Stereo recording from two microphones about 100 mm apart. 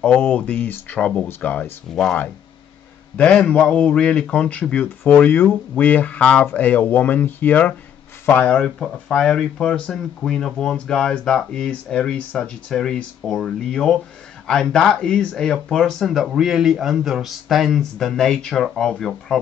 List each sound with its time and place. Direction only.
0.0 s speech: 10° left (ahead or behind)